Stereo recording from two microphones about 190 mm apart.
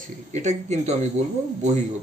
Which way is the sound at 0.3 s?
40° right (ahead or behind).